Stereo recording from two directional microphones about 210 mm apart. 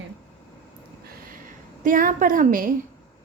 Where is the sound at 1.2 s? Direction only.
40° right (ahead or behind).